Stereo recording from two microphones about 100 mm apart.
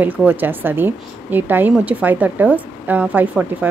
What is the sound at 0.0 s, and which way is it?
Speech, 20° right (ahead or behind).